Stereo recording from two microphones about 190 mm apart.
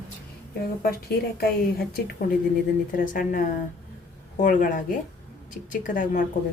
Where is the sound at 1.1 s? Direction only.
55° left (ahead or behind).